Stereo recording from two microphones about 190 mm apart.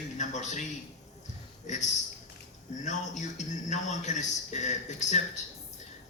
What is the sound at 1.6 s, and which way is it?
A man's voice, 40° left (ahead or behind).